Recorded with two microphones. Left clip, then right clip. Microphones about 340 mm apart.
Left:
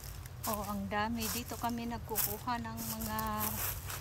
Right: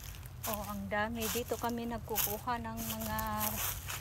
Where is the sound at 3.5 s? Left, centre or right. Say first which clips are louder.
Right 2 dB; right.